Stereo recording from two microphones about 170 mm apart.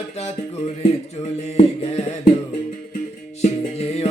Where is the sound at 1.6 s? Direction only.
35° left (ahead or behind).